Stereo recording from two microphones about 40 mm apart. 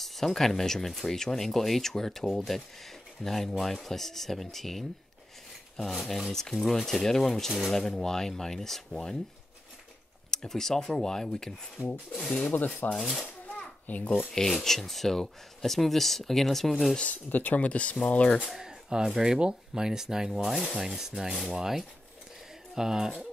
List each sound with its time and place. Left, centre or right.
0.0 s speech: centre
10.3 s speech: centre
12.9 s speech: centre
13.8 s a child's voice: left
14.3 s speech: centre
17.1 s speech: left
17.6 s a child's voice: left
18.4 s speech: centre